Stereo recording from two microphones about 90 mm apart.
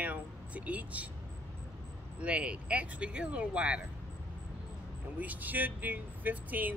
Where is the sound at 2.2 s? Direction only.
15° right (ahead or behind).